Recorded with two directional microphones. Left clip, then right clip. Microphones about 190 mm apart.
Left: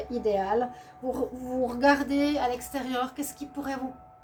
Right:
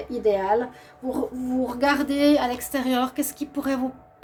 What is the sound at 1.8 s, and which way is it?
A woman's voice, 50° right (ahead or behind).